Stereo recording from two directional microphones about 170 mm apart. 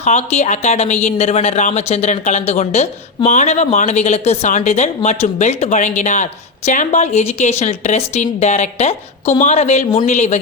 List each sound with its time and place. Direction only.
0.0 s a woman's voice: 40° left (ahead or behind)